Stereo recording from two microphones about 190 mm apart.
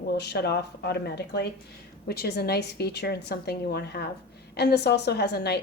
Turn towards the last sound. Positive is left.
turn(degrees=60)  # may be behind; listen again after turning